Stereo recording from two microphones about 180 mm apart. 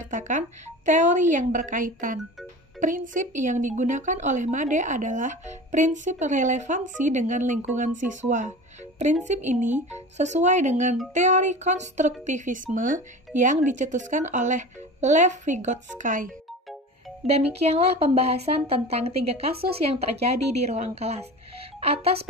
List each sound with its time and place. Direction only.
0.1 s a woman's voice: 45° right (ahead or behind)
17.3 s speech: 35° right (ahead or behind)